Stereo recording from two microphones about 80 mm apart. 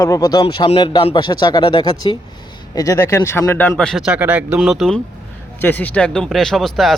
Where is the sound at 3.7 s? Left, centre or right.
Centre.